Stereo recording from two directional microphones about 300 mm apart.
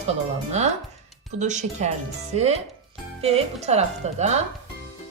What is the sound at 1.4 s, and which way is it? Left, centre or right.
Speech, right.